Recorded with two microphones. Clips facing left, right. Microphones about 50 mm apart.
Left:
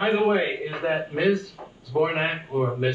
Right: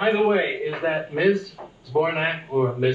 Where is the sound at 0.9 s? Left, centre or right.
Centre.